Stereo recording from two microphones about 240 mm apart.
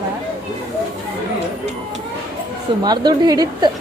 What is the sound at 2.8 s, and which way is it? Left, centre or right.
Speech, centre.